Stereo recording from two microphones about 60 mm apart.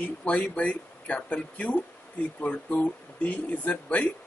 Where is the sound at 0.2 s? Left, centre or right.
Left.